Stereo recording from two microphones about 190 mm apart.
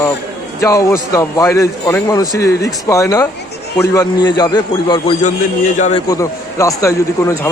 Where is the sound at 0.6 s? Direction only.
15° left (ahead or behind).